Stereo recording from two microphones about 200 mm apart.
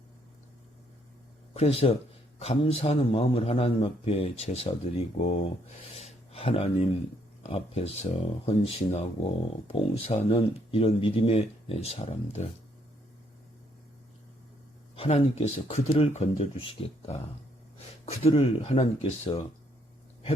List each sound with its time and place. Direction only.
1.5 s speech: 30° left (ahead or behind)
6.0 s a sound: 30° left (ahead or behind)
7.4 s speech: 30° left (ahead or behind)
14.9 s speech: 30° left (ahead or behind)